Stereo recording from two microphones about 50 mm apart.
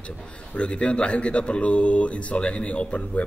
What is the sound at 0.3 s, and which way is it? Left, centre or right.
A man's voice, left.